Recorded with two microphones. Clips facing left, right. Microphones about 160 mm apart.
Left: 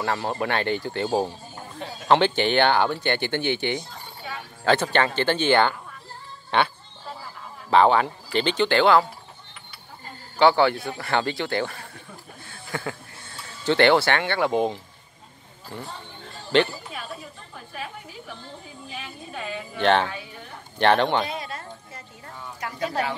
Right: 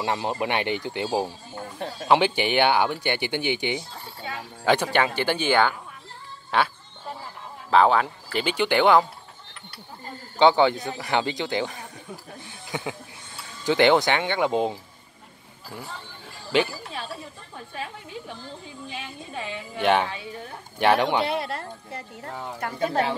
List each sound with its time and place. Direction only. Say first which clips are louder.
0.0 s speech: even; 20° right (ahead or behind)
7.7 s speech: left 1 dB; centre (ahead or behind); by 9.0 s 15° right (ahead or behind)
10.4 s speech: even; 20° right (ahead or behind)
15.7 s a sound: left 2 dB; 5° right (ahead or behind)
18.9 s a sound: even; 25° right (ahead or behind)
19.8 s speech: left 1 dB; 10° right (ahead or behind)
21.3 s speech: right 5 dB; 65° right (ahead or behind)